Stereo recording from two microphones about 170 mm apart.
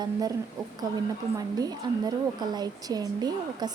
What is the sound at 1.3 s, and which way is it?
A woman's voice, 20° right (ahead or behind).